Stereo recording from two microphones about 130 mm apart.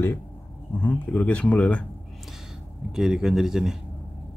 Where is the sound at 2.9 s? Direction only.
5° right (ahead or behind).